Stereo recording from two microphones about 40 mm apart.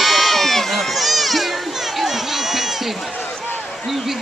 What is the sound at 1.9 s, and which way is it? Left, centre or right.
Run, centre.